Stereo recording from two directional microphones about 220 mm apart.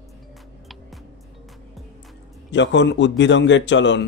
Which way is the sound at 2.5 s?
55° left (ahead or behind).